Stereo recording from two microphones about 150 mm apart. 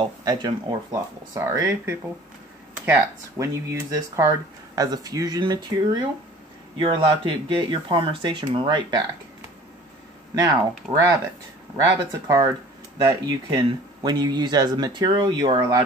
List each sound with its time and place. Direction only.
0.0 s speech: 30° right (ahead or behind)
10.3 s speech: 25° right (ahead or behind)
10.8 s speech: 10° right (ahead or behind)
11.7 s speech: 25° right (ahead or behind)